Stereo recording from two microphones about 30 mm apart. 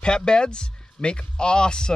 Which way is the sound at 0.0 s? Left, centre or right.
Left.